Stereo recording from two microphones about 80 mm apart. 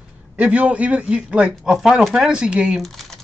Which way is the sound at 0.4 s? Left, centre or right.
Centre.